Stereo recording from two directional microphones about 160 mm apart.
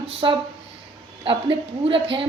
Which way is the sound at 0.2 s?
30° right (ahead or behind).